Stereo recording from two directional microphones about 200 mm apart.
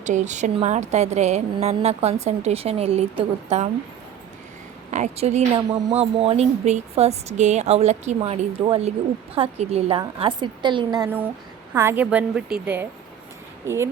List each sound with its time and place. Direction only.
0.0 s a woman's voice: 35° right (ahead or behind)
4.9 s a woman's voice: 35° right (ahead or behind); by 13.9 s 15° right (ahead or behind)